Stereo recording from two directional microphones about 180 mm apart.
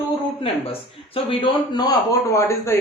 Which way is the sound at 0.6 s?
30° left (ahead or behind).